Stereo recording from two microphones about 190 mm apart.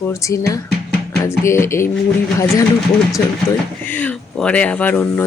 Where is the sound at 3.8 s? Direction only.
10° left (ahead or behind).